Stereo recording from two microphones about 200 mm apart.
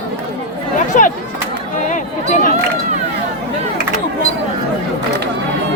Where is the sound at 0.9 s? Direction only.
40° left (ahead or behind).